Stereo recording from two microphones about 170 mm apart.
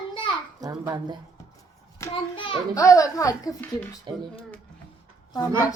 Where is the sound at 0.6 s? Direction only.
20° right (ahead or behind).